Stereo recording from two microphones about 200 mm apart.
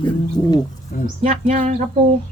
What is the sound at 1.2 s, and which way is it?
Speech, 35° right (ahead or behind).